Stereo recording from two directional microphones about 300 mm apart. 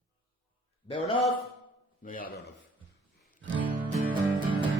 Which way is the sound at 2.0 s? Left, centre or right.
Left.